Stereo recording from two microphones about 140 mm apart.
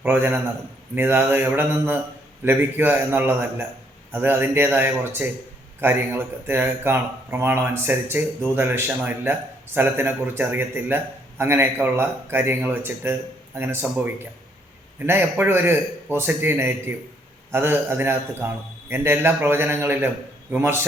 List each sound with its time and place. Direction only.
0.0 s speech: 15° right (ahead or behind)